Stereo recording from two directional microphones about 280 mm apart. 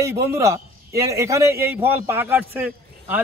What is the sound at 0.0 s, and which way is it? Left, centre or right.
A man's voice, centre.